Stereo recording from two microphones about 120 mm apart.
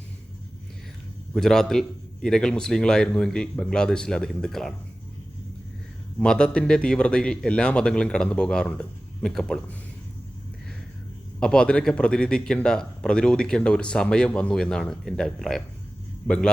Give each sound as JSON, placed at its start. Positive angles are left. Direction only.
{"t": 1.4, "sound": "speech", "side_deg": 5}
{"t": 6.1, "sound": "a man's voice", "side_deg": 5}
{"t": 11.3, "sound": "a man's voice", "side_deg": 5}